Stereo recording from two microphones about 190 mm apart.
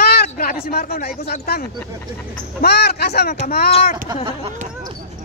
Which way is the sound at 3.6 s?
35° left (ahead or behind).